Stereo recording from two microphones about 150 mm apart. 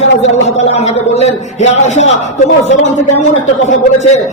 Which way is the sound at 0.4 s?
45° left (ahead or behind).